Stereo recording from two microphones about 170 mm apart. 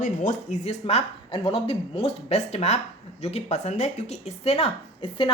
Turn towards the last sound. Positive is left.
turn(degrees=30)  # may be behind; listen again after turning